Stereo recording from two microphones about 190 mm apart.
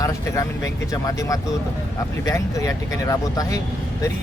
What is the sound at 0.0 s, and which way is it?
Speech, 15° left (ahead or behind).